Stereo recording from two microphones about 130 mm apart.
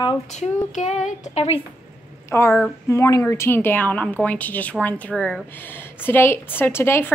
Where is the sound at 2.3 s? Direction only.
20° left (ahead or behind).